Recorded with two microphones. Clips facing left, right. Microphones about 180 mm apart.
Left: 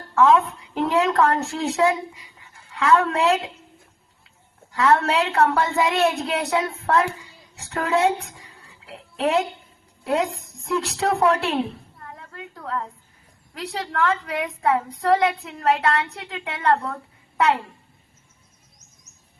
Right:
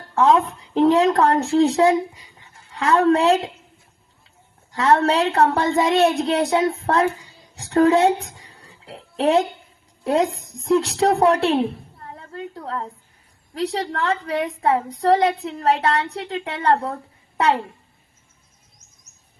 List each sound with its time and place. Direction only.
0.2 s a woman's voice: 30° right (ahead or behind)
4.7 s speech: 30° right (ahead or behind)
7.5 s a sound: 30° right (ahead or behind)
10.0 s speech: 30° right (ahead or behind)
11.9 s a sound: 35° right (ahead or behind)
13.5 s a woman's voice: 30° right (ahead or behind)